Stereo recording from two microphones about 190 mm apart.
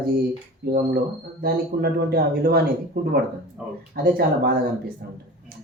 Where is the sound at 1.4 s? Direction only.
55° right (ahead or behind).